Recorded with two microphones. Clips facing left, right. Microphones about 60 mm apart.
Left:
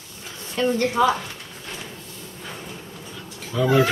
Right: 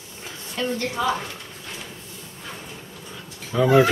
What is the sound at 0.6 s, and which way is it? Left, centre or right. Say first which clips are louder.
Speech: left 5 dB; centre.